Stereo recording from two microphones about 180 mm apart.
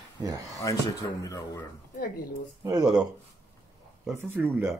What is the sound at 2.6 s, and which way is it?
Speech, 20° right (ahead or behind).